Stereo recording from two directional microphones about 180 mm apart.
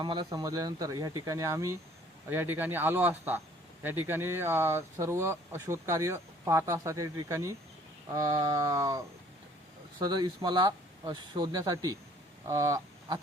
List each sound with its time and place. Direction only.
0.0 s speech: 25° right (ahead or behind)